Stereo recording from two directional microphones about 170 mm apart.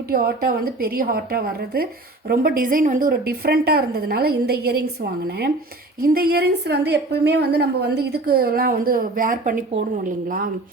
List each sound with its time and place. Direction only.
0.1 s a woman's voice: 60° right (ahead or behind)